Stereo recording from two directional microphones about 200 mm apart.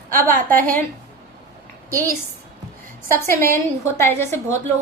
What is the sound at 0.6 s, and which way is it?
Speech, 40° right (ahead or behind).